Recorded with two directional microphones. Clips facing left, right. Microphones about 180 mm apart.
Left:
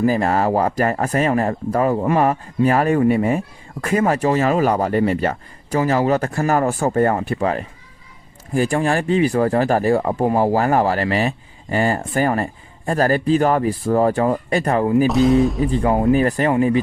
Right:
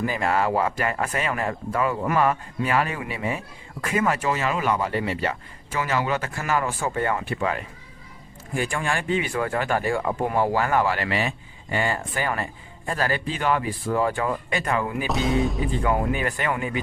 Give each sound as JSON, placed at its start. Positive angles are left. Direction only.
{"t": 0.0, "sound": "speech", "side_deg": 40}
{"t": 15.0, "sound": "speech", "side_deg": 0}
{"t": 15.6, "sound": "speech", "side_deg": 35}